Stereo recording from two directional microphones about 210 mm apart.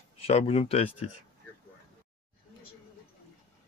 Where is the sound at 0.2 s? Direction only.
30° left (ahead or behind).